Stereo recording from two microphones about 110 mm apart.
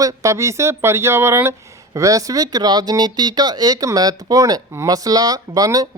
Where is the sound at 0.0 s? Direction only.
30° right (ahead or behind).